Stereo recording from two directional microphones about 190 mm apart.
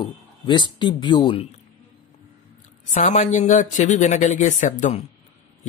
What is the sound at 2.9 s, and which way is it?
A man's voice, 40° left (ahead or behind).